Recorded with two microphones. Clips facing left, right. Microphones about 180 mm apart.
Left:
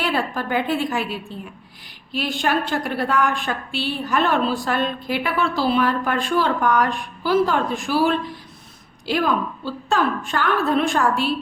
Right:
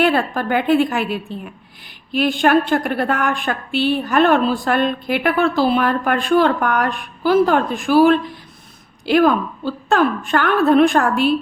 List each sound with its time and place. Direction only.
0.0 s a woman's voice: 55° right (ahead or behind)